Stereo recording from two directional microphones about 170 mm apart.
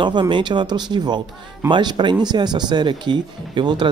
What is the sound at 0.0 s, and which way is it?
Speech, 25° right (ahead or behind).